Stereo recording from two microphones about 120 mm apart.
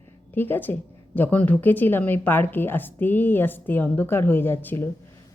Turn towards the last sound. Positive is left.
turn(degrees=15)  # may be behind; listen again after turning